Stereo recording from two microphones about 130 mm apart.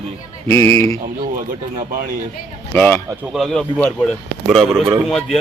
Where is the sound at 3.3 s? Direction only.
Centre (ahead or behind).